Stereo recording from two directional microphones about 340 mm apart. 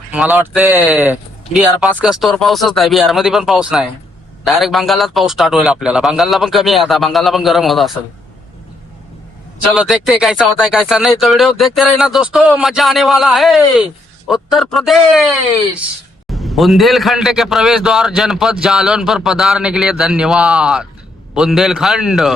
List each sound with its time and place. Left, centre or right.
0.1 s a man's voice: centre
9.7 s a man's voice: centre